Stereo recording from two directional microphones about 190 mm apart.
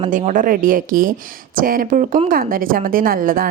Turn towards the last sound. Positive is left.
turn(degrees=-50)  # may be behind; listen again after turning